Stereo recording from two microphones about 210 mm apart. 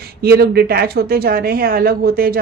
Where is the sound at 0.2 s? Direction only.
50° right (ahead or behind).